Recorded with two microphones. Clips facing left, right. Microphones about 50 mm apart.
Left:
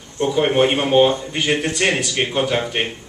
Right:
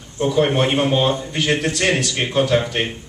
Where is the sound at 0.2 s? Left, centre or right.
Centre.